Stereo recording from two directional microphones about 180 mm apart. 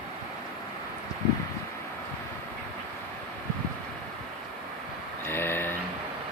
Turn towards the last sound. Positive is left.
turn(degrees=10)  # may be behind; listen again after turning